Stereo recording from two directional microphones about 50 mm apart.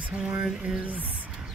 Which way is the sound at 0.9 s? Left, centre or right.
Right.